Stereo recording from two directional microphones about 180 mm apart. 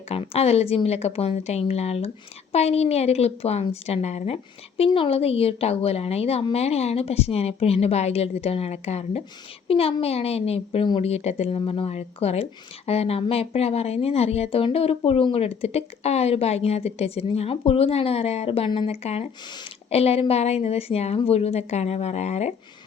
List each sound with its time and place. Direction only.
0.1 s a woman's voice: 35° left (ahead or behind)